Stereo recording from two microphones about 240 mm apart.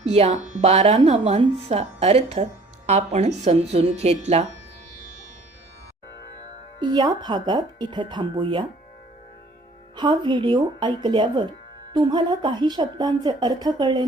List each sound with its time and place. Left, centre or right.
0.0 s speech: right
6.7 s speech: centre
9.9 s a woman's voice: centre